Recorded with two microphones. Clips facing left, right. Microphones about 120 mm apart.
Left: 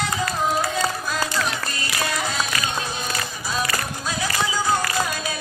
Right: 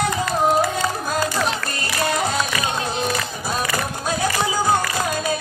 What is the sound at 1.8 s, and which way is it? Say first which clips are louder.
Music: right 5 dB; 45° right (ahead or behind).